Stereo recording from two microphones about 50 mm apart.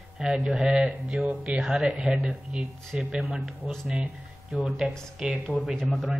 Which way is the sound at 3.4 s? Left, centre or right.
Centre.